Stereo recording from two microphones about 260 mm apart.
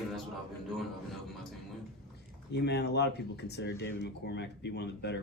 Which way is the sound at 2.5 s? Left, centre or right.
Left.